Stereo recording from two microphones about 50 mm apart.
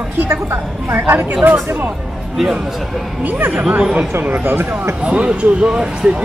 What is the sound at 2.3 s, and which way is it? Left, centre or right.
Speech, centre.